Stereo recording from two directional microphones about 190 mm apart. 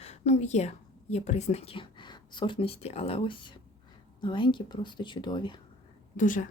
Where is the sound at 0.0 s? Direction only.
35° left (ahead or behind).